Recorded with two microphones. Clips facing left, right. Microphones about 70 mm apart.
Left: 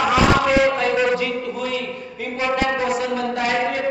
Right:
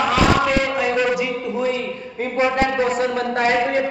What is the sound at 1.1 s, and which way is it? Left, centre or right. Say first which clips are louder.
A man's voice: right 1 dB; centre.